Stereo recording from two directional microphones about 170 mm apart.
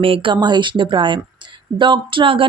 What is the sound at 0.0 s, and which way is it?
Speech, 30° right (ahead or behind).